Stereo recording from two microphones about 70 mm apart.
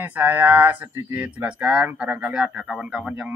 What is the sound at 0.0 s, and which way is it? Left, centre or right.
A man's voice, right.